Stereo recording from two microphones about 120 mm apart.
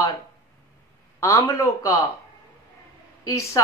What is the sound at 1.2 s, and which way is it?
Speech, 25° left (ahead or behind).